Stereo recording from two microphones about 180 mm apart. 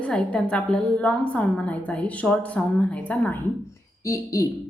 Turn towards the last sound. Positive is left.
turn(degrees=15)  # may be behind; listen again after turning